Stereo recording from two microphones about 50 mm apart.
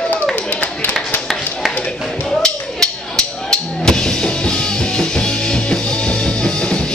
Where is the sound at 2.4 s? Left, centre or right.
Centre.